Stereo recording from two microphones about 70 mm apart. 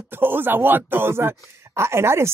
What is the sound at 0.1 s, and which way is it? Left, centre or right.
Speech, right.